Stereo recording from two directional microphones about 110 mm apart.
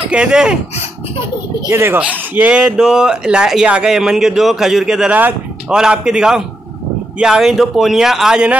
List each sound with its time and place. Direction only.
0.1 s speech: 10° right (ahead or behind)
1.7 s speech: 25° right (ahead or behind)
2.0 s speech: 10° right (ahead or behind)